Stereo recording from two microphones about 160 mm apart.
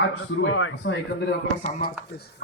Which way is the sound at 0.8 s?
90° left.